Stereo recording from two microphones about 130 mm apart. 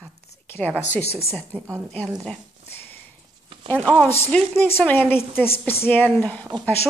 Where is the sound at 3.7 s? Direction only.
10° left (ahead or behind).